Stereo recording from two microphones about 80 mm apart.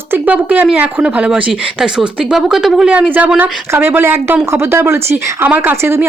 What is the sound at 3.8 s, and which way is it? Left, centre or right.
Speech, right.